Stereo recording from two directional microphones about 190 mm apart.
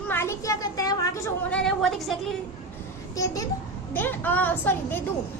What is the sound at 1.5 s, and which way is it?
Speech, 5° left (ahead or behind).